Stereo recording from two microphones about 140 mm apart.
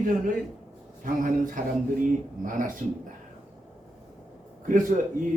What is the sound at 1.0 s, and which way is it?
A man's voice, 75° right (ahead or behind).